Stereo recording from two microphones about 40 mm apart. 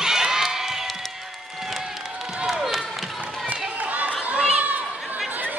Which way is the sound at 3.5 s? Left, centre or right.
Right.